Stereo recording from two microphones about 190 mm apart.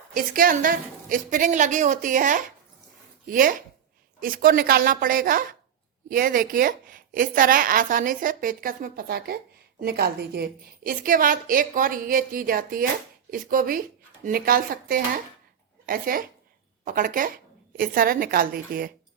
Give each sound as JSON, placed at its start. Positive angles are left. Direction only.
{"t": 0.1, "sound": "a woman's voice", "side_deg": -45}